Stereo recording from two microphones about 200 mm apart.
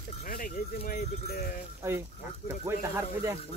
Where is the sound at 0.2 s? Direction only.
45° left (ahead or behind).